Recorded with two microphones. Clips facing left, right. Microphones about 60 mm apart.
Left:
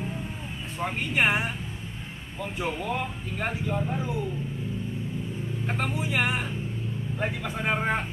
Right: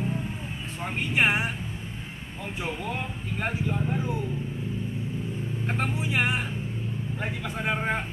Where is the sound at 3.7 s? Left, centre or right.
Centre.